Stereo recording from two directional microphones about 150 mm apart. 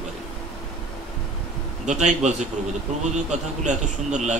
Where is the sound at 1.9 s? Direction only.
50° right (ahead or behind).